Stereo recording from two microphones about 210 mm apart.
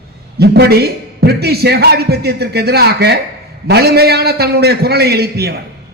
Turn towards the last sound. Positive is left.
turn(degrees=-50)  # may be behind; listen again after turning